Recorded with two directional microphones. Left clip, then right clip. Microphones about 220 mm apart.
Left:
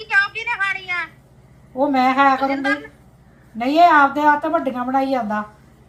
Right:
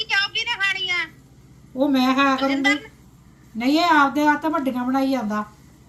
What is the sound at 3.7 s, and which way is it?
A woman's voice, 20° left (ahead or behind).